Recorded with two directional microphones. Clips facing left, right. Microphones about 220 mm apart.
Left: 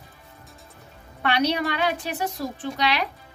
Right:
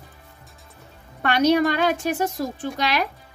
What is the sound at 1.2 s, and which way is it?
A woman's voice, 45° right (ahead or behind).